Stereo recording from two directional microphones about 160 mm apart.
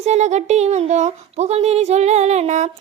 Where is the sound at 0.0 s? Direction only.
45° right (ahead or behind).